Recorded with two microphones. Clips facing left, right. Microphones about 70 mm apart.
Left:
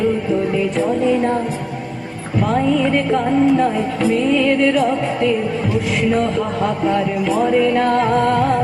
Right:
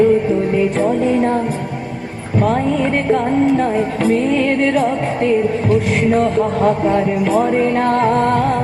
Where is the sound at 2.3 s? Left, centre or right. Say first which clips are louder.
Right 1 dB; right.